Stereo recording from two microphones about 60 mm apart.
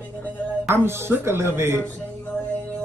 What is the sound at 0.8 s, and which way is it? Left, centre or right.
Speech, right.